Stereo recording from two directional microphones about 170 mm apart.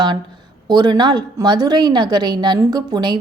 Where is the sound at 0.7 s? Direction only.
25° right (ahead or behind).